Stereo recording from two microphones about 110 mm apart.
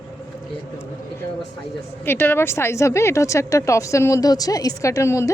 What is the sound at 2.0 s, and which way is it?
A woman's voice, 20° left (ahead or behind).